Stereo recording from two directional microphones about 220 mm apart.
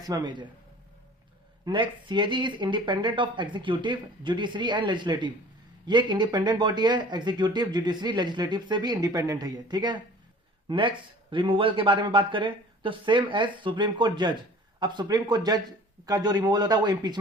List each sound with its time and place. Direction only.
0.0 s speech: 15° right (ahead or behind)
1.6 s speech: 20° right (ahead or behind)